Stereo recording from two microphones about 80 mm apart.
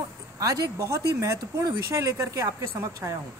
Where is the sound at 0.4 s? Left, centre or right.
Right.